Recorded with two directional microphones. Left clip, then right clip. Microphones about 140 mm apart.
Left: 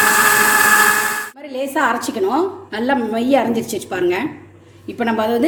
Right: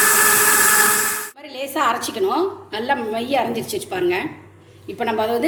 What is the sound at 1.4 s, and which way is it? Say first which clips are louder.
A woman's voice: left 3 dB; 55° left (ahead or behind).